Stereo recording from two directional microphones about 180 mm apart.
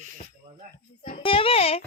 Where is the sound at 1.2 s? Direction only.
30° left (ahead or behind).